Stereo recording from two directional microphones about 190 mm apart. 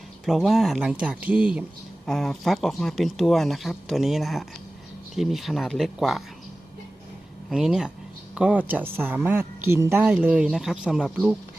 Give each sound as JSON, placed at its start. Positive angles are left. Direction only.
{"t": 0.3, "sound": "speech", "side_deg": 0}
{"t": 7.5, "sound": "a woman's voice", "side_deg": -5}